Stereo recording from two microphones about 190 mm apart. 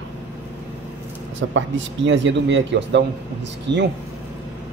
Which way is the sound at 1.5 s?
80° right.